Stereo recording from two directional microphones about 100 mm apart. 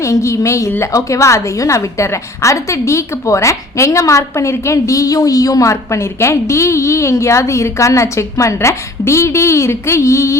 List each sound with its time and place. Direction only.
0.0 s a woman's voice: 30° left (ahead or behind)